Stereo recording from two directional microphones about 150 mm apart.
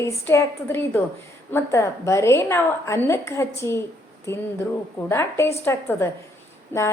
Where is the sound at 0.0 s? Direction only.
15° left (ahead or behind).